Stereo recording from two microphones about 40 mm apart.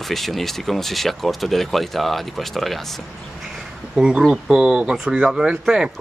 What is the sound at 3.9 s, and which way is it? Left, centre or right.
Speech, centre.